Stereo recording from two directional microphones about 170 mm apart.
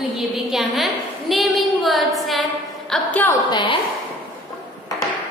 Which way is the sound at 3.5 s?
30° left (ahead or behind).